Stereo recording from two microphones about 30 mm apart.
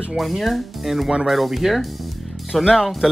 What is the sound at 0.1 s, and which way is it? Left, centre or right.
Speech, centre.